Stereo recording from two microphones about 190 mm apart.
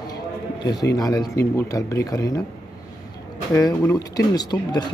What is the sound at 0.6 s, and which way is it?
Speech, 20° left (ahead or behind).